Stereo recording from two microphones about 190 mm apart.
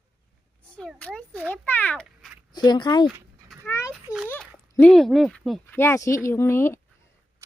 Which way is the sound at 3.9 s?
5° right (ahead or behind).